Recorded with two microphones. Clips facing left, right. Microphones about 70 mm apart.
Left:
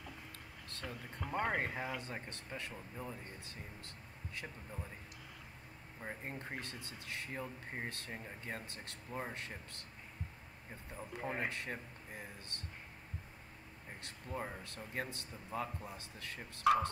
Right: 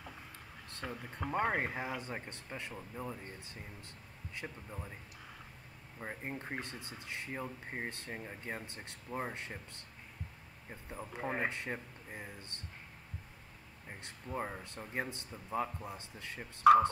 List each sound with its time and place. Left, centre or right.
0.7 s speech: right
5.9 s speech: centre
10.9 s speech: right
14.0 s speech: centre